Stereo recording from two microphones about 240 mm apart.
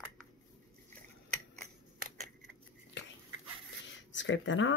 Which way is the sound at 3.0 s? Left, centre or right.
Left.